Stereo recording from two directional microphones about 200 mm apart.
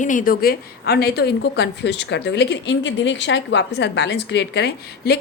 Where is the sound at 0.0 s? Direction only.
40° left (ahead or behind).